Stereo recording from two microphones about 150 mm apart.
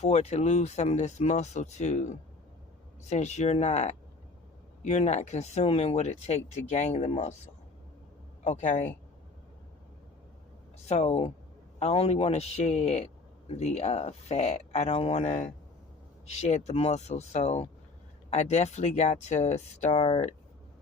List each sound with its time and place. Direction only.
0.0 s speech: 45° left (ahead or behind)
8.4 s speech: 50° left (ahead or behind)
10.8 s speech: 45° left (ahead or behind)